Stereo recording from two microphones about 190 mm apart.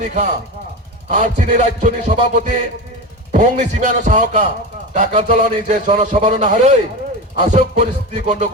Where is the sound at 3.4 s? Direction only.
40° right (ahead or behind).